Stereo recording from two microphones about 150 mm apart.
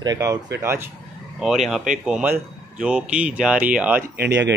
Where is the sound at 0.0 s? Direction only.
25° right (ahead or behind).